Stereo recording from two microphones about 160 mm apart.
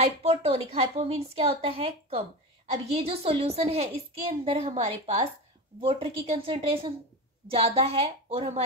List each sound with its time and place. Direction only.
0.0 s a woman's voice: 40° right (ahead or behind)
5.8 s a woman's voice: 35° right (ahead or behind)